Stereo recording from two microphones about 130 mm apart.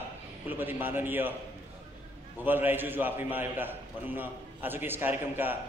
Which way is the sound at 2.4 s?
15° right (ahead or behind).